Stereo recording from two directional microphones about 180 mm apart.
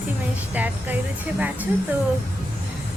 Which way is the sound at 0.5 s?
10° right (ahead or behind).